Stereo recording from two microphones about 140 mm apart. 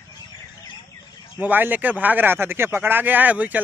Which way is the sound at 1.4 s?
10° right (ahead or behind).